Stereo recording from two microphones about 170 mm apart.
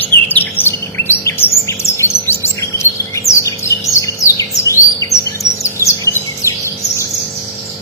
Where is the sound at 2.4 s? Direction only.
15° left (ahead or behind).